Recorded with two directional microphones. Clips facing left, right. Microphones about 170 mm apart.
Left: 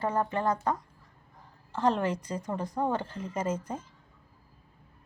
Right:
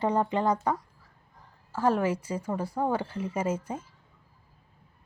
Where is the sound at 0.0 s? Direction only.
15° right (ahead or behind).